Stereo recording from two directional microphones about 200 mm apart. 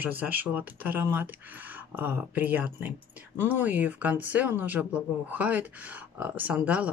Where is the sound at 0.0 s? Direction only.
10° right (ahead or behind).